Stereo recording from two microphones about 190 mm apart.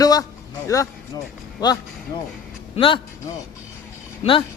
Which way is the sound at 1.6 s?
20° left (ahead or behind).